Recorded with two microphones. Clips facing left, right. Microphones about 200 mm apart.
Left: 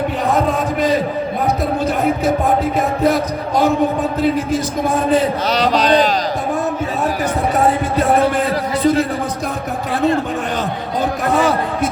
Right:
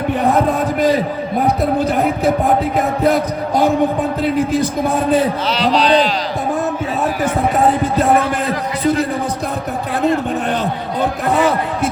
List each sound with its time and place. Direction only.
5.5 s speech: 45° left (ahead or behind)